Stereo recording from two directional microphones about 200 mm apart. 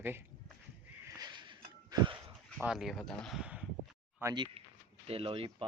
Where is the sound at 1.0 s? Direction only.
15° right (ahead or behind).